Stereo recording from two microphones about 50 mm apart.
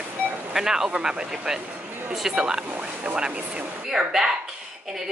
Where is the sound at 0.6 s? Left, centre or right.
Centre.